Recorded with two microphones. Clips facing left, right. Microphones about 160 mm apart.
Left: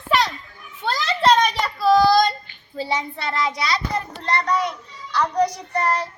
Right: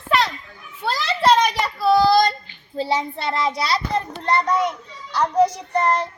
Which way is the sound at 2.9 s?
30° right (ahead or behind).